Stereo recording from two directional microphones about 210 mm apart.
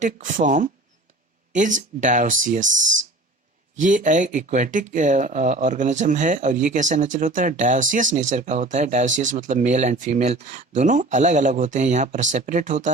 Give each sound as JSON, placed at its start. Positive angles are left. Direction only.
{"t": 0.0, "sound": "speech", "side_deg": -40}
{"t": 3.8, "sound": "speech", "side_deg": -35}